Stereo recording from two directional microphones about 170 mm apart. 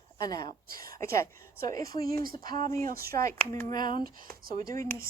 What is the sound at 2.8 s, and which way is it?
Speech, 60° right (ahead or behind).